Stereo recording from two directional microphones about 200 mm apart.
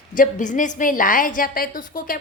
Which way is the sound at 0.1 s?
40° left (ahead or behind).